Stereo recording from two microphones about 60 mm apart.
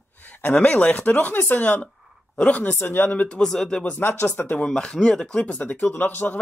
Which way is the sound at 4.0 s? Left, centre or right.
Left.